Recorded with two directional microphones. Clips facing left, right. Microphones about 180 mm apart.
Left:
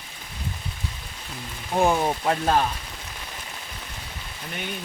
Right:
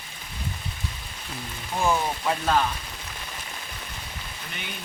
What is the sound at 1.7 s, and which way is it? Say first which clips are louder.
Speech: left 4 dB; 35° left (ahead or behind).